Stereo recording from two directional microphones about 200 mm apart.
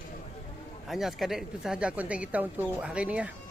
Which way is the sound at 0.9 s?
Centre (ahead or behind).